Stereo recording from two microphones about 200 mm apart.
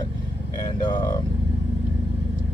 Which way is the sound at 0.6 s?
20° left (ahead or behind).